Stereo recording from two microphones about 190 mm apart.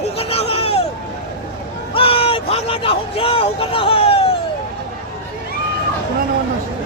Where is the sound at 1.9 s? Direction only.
30° left (ahead or behind).